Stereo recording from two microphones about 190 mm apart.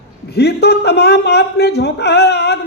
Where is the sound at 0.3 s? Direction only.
60° left (ahead or behind).